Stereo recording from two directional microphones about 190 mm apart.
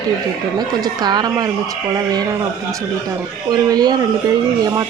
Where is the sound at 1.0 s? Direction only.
20° right (ahead or behind).